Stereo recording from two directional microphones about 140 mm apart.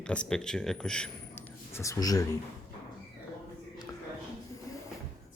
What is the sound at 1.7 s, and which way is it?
Speech, 20° left (ahead or behind).